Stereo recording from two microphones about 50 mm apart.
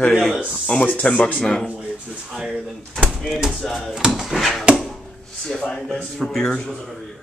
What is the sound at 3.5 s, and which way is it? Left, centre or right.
Speech, centre.